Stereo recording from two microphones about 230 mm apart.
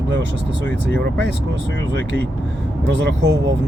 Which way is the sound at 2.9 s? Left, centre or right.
Right.